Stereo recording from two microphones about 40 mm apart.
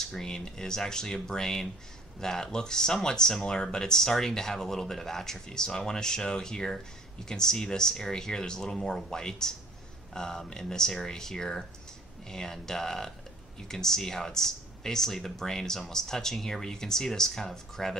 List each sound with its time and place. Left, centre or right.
0.0 s speech: centre